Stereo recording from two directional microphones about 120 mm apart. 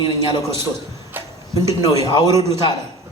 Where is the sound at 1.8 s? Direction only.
35° left (ahead or behind).